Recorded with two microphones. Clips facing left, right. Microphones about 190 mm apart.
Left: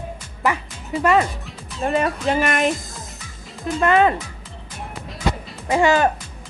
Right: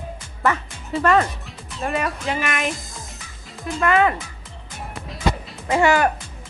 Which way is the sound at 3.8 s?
25° left (ahead or behind).